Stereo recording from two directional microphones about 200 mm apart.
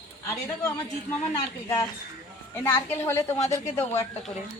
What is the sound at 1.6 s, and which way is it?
Speech, 15° left (ahead or behind).